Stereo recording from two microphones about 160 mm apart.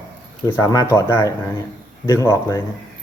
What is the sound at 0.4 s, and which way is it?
Speech, 20° left (ahead or behind).